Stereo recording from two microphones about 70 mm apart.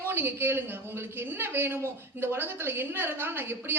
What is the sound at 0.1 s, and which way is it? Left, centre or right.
A man's voice, right.